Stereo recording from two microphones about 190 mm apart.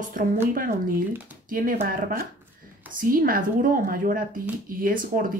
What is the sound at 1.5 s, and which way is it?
Speech, 45° right (ahead or behind).